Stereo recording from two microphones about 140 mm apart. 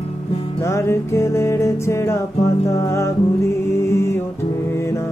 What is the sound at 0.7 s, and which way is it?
Music, 20° left (ahead or behind).